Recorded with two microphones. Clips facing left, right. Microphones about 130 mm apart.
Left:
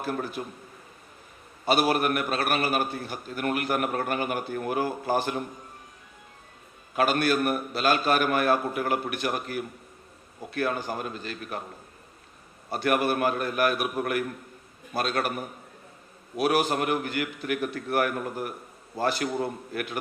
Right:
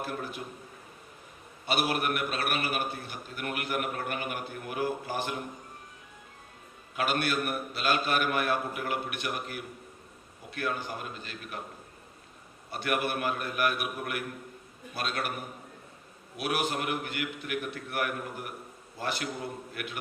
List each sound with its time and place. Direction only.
0.4 s a man's voice: 50° left (ahead or behind)
1.6 s a man's voice: 40° left (ahead or behind)
6.9 s a man's voice: 40° left (ahead or behind)
12.7 s a man's voice: 40° left (ahead or behind)
16.4 s a man's voice: 40° left (ahead or behind)